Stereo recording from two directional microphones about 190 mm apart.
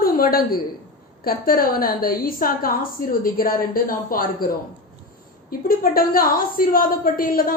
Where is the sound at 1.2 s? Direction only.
50° left (ahead or behind).